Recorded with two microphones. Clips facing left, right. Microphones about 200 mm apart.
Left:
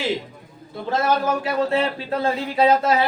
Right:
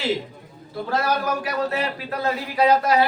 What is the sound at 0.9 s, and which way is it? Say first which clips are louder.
Speech: left 3 dB; 25° left (ahead or behind).